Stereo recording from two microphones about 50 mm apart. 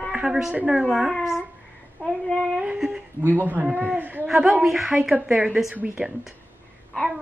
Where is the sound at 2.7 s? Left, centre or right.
Centre.